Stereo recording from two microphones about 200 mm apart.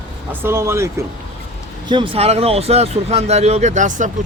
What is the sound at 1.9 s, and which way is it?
Speech, 25° right (ahead or behind).